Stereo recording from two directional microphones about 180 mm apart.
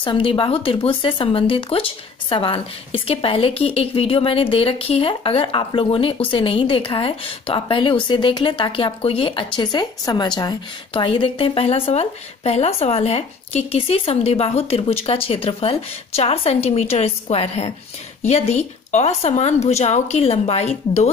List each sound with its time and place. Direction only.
0.0 s speech: 30° left (ahead or behind)